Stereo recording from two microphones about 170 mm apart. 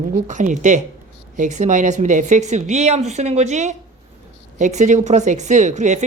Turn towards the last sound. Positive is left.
turn(degrees=-45)  # may be behind; listen again after turning